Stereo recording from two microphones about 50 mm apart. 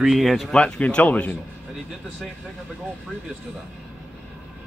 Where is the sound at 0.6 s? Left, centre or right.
Left.